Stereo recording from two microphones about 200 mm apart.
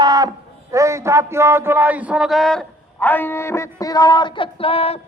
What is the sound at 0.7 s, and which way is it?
A man's voice, 15° right (ahead or behind).